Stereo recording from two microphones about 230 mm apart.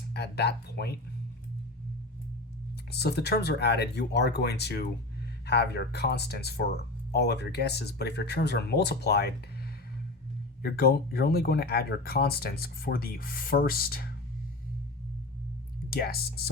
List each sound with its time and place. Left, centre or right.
0.1 s speech: left
2.9 s speech: left
10.6 s speech: left
15.9 s speech: left